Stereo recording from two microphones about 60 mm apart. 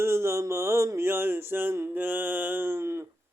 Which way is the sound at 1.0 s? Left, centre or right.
Right.